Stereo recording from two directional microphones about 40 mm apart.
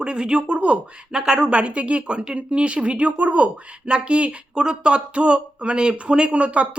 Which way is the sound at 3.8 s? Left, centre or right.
Right.